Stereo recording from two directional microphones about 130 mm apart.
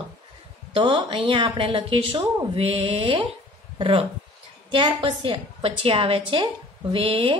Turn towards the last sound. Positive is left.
turn(degrees=-40)  # may be behind; listen again after turning